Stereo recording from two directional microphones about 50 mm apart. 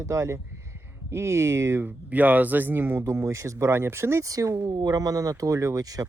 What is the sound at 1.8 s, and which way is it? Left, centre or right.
Speech, right.